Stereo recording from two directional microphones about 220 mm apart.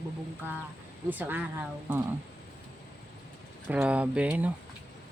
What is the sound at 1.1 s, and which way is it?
Speech, 10° right (ahead or behind).